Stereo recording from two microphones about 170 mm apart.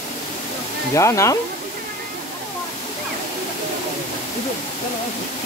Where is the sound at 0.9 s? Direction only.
20° left (ahead or behind).